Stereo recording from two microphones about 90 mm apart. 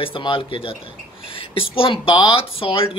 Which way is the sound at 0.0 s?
70° left (ahead or behind).